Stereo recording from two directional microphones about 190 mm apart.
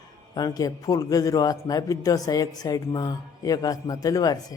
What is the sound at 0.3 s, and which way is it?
A man's voice, 20° left (ahead or behind).